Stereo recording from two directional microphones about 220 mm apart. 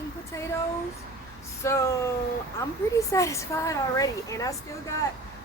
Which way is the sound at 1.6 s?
15° left (ahead or behind).